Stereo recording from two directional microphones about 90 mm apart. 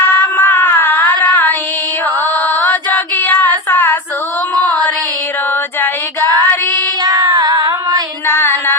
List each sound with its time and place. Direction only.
0.1 s a sound: 25° left (ahead or behind)
1.2 s child singing: 15° left (ahead or behind)
2.5 s female singing: 20° left (ahead or behind)
5.8 s child singing: 25° left (ahead or behind)
7.0 s female singing: 40° right (ahead or behind)
8.3 s a sound: 25° left (ahead or behind)